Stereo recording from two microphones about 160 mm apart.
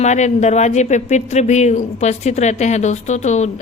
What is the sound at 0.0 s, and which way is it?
Speech, 45° left (ahead or behind).